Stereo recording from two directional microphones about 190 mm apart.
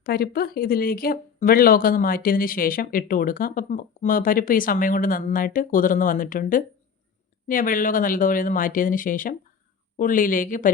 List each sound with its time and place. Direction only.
0.0 s speech: 55° left (ahead or behind)